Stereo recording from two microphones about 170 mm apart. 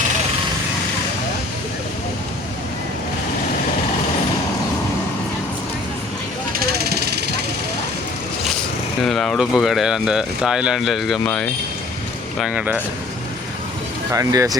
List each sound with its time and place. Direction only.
6.6 s vehicle: 65° right (ahead or behind)
9.0 s speech: centre (ahead or behind)
14.1 s speech: 20° right (ahead or behind)